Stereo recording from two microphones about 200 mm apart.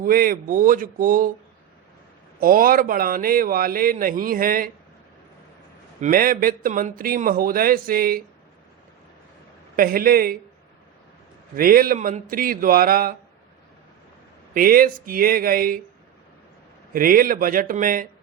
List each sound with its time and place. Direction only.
0.0 s speech: 45° right (ahead or behind)
2.4 s speech: 45° right (ahead or behind)
6.0 s speech: 45° right (ahead or behind)
9.7 s speech: 45° right (ahead or behind)
11.5 s speech: 45° right (ahead or behind)
14.5 s speech: 45° right (ahead or behind)
16.9 s speech: 45° right (ahead or behind)